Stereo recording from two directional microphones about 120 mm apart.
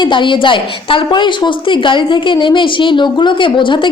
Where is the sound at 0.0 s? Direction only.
40° left (ahead or behind).